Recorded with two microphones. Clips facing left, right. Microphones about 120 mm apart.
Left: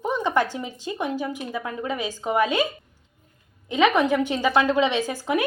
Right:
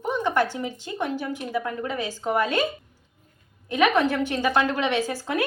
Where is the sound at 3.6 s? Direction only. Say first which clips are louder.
Left 1 dB; 20° left (ahead or behind).